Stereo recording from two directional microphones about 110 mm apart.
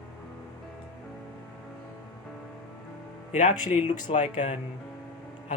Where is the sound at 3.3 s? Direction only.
90° left.